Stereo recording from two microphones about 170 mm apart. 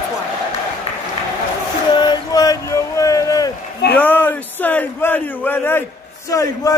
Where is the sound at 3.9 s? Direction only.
10° left (ahead or behind).